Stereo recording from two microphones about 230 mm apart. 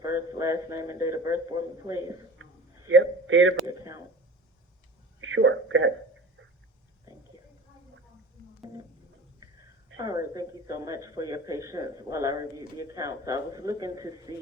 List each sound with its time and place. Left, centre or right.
0.0 s a man's voice: centre
2.4 s a sound: right
2.9 s a man's voice: right
3.7 s a sound: centre
5.2 s speech: right
10.0 s speech: centre